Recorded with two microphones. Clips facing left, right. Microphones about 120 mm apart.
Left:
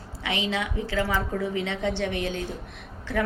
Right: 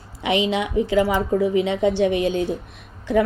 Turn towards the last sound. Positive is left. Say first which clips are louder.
# right 8 dB
turn(degrees=-15)  # may be behind; listen again after turning